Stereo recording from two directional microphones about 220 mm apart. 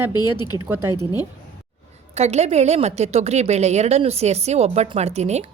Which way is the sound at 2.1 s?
30° right (ahead or behind).